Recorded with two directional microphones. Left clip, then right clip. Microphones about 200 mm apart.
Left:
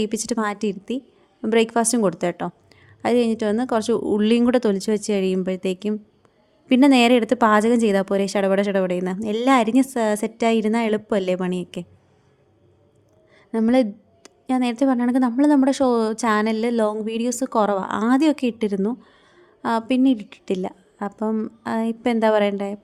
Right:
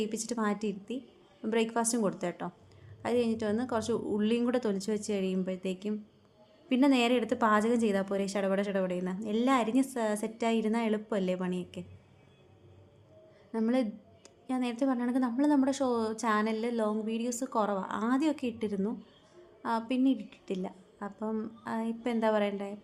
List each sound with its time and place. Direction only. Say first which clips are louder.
0.0 s speech: left 10 dB; 50° left (ahead or behind)
13.5 s speech: left 12 dB; 45° left (ahead or behind)